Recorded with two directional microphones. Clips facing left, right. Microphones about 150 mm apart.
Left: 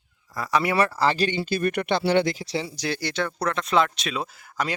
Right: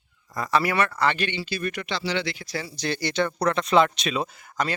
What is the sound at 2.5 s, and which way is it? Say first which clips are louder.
Speech: left 4 dB; 25° left (ahead or behind).